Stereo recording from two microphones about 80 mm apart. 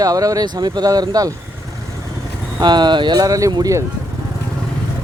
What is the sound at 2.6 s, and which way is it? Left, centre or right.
Speech, right.